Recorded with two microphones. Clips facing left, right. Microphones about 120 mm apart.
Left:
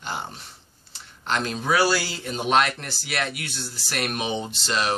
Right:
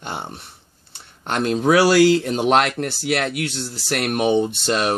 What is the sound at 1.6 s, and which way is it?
Speech, 85° right.